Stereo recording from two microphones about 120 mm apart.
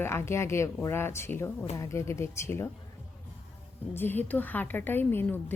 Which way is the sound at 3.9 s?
15° left (ahead or behind).